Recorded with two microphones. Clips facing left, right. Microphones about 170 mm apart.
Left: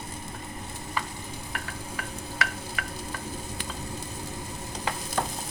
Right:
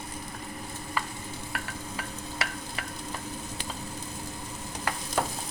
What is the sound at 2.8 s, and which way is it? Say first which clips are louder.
Stir: left 2 dB; 30° right (ahead or behind).